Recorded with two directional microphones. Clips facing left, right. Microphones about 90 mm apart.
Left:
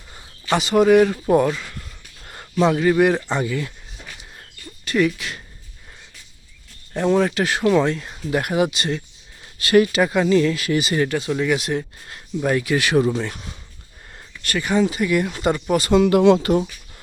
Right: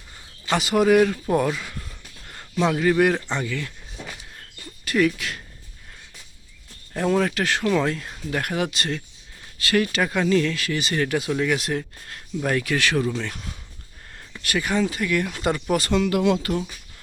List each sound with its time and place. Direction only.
0.5 s speech: centre (ahead or behind)
1.5 s speech: 5° right (ahead or behind); by 3.7 s 10° left (ahead or behind)
4.9 s speech: centre (ahead or behind)
6.9 s speech: centre (ahead or behind); by 13.2 s 20° left (ahead or behind)
13.2 s speech: 5° left (ahead or behind)
14.8 s speech: 10° left (ahead or behind)
16.0 s speech: 30° left (ahead or behind)